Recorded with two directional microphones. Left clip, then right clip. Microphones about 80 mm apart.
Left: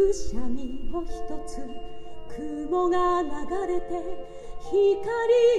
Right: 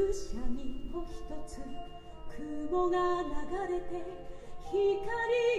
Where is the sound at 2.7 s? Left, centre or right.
Left.